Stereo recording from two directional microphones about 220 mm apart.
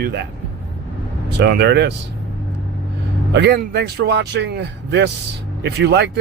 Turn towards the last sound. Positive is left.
turn(degrees=-50)  # may be behind; listen again after turning